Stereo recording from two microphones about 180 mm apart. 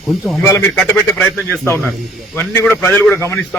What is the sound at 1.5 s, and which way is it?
A man's voice, 15° left (ahead or behind).